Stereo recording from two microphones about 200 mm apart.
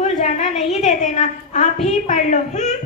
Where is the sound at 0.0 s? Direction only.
35° left (ahead or behind).